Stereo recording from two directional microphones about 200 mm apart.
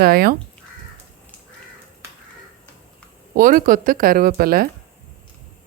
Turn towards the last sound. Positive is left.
turn(degrees=-50)  # may be behind; listen again after turning